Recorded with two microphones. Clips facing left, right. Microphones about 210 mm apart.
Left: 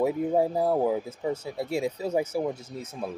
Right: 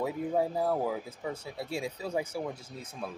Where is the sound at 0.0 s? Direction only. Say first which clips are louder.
Left 6 dB; 25° left (ahead or behind).